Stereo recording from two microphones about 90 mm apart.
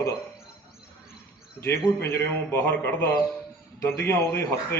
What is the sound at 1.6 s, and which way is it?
Speech, 10° left (ahead or behind).